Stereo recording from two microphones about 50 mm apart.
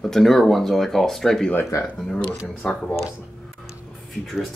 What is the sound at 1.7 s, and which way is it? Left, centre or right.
Speech, left.